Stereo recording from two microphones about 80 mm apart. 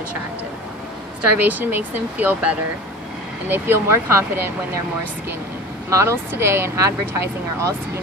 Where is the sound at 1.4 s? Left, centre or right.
Right.